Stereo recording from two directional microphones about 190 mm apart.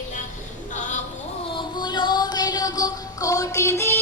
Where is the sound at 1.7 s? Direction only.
25° left (ahead or behind).